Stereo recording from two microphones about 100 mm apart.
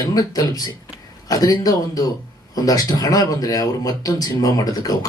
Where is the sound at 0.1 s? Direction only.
40° left (ahead or behind).